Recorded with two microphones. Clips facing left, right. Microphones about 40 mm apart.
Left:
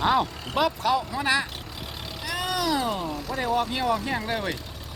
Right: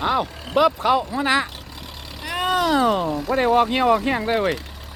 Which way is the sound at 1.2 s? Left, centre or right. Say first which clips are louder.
Right 3 dB; right.